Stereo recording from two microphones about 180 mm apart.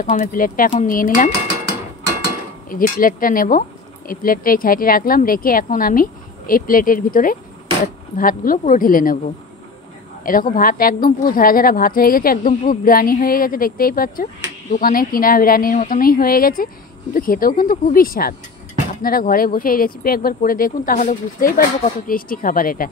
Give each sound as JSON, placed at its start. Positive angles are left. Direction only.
{"t": 0.1, "sound": "a woman's voice", "side_deg": 50}
{"t": 2.7, "sound": "a woman's voice", "side_deg": 50}
{"t": 10.2, "sound": "a woman's voice", "side_deg": 50}